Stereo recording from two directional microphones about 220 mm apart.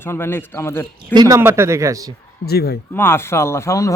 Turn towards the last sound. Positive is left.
turn(degrees=15)  # may be behind; listen again after turning